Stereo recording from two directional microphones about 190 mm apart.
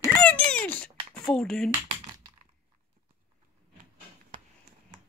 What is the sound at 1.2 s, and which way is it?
Speech, 5° left (ahead or behind).